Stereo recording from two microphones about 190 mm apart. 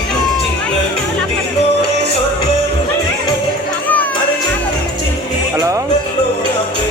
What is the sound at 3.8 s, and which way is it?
Music, 10° left (ahead or behind).